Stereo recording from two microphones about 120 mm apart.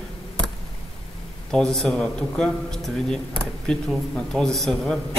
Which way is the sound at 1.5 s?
5° left (ahead or behind).